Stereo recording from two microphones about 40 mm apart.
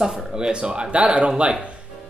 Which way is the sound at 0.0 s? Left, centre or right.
Right.